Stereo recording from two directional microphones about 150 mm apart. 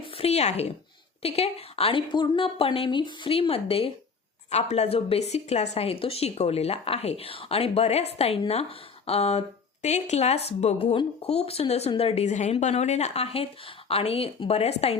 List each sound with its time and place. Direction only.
0.2 s a woman's voice: 45° left (ahead or behind)